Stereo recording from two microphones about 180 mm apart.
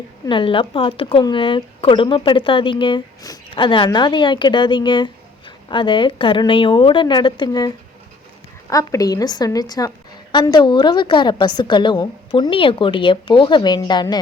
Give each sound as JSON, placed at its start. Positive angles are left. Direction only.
{"t": 0.3, "sound": "speech", "side_deg": 30}
{"t": 8.7, "sound": "speech", "side_deg": 20}